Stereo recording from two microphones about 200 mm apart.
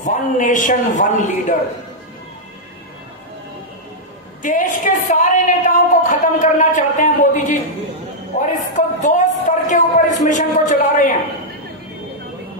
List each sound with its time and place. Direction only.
0.0 s a woman's voice: 40° left (ahead or behind)
4.4 s a woman's voice: 40° left (ahead or behind)